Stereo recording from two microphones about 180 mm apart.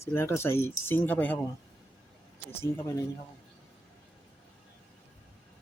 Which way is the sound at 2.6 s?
15° left (ahead or behind).